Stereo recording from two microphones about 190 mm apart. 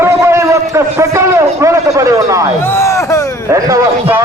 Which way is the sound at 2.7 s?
15° left (ahead or behind).